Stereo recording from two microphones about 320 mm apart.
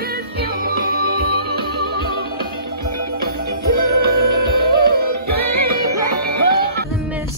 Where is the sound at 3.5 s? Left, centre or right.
Right.